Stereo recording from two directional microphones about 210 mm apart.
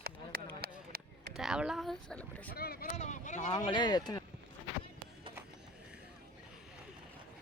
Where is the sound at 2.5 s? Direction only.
45° left (ahead or behind).